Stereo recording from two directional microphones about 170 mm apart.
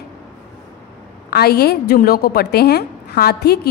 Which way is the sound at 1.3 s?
65° left (ahead or behind).